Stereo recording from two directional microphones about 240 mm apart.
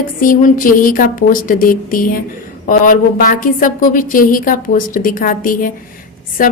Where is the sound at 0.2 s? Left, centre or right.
Left.